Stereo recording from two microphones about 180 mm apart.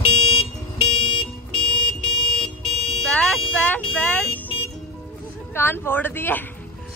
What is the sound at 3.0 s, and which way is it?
Vehicle, 5° left (ahead or behind).